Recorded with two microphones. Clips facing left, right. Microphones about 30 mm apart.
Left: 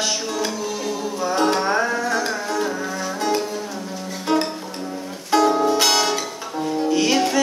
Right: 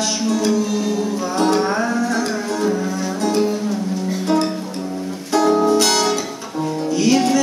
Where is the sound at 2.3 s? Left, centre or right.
Centre.